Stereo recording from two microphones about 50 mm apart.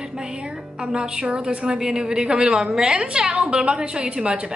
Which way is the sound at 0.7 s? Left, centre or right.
Centre.